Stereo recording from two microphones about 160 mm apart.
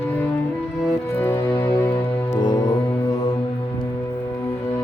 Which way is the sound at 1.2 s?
15° left (ahead or behind).